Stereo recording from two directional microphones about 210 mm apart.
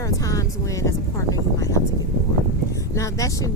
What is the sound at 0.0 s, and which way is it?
Speech, 15° left (ahead or behind).